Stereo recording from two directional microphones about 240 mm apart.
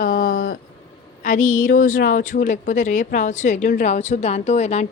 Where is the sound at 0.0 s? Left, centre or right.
Left.